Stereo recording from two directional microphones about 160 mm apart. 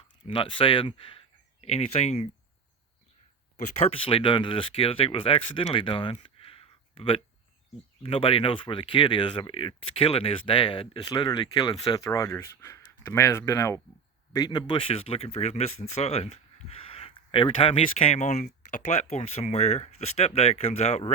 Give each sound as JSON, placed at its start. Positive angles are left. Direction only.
{"t": 0.3, "sound": "speech", "side_deg": 30}
{"t": 3.8, "sound": "speech", "side_deg": 40}